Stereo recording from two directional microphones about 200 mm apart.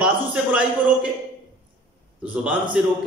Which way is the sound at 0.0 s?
5° right (ahead or behind).